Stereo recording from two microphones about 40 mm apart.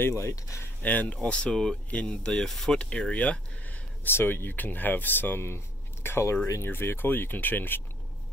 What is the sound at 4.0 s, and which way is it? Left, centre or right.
Speech, left.